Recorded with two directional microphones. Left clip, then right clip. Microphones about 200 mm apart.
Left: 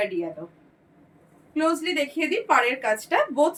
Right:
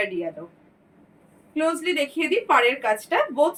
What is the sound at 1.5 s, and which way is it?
A woman's voice, 10° left (ahead or behind).